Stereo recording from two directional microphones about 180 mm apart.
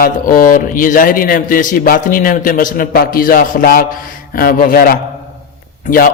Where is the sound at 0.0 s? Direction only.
50° left (ahead or behind).